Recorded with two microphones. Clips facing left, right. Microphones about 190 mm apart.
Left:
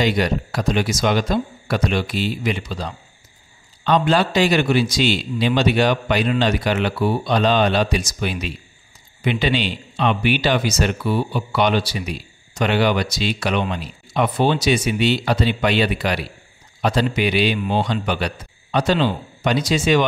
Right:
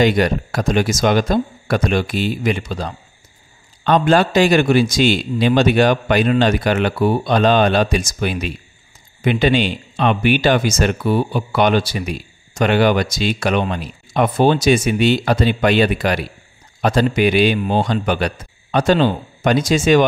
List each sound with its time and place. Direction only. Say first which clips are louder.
0.0 s a man's voice: right 4 dB; 50° right (ahead or behind)